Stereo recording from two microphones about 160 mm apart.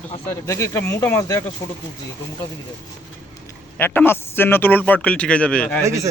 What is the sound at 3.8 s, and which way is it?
A man's voice, 15° left (ahead or behind).